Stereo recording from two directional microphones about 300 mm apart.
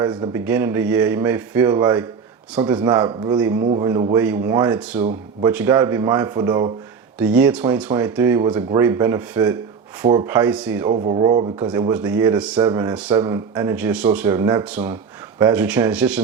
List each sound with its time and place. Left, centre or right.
0.0 s a man's voice: centre
10.9 s a man's voice: right; by 16.2 s centre